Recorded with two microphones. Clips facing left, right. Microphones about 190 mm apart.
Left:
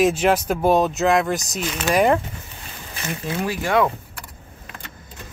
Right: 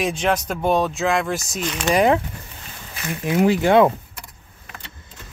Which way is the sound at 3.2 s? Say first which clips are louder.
Right 9 dB; 20° right (ahead or behind).